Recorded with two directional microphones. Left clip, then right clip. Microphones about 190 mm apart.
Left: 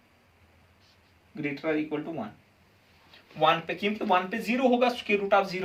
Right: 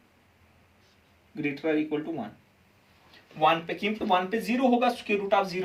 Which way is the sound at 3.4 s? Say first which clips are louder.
Even; 20° left (ahead or behind).